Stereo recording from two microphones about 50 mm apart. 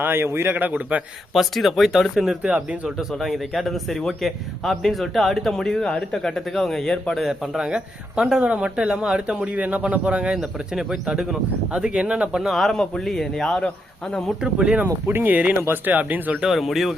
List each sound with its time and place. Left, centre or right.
0.0 s a man's voice: right
0.5 s speech: right
1.3 s a man's voice: centre
7.2 s a man's voice: centre
7.6 s speech: centre
9.6 s speech: right
12.5 s a man's voice: centre
14.4 s speech: centre
14.8 s a man's voice: right
15.2 s speech: right
16.4 s a man's voice: centre